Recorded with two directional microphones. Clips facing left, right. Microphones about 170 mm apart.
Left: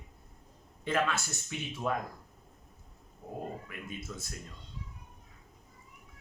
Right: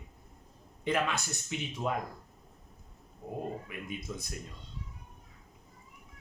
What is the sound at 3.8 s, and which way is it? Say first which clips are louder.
Speech: right 2 dB; 15° right (ahead or behind).